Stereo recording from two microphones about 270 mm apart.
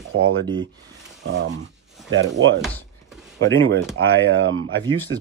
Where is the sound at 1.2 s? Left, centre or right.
Right.